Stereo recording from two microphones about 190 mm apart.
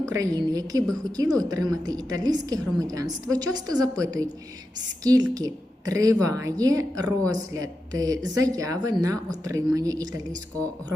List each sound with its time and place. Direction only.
0.0 s a woman's voice: 15° right (ahead or behind)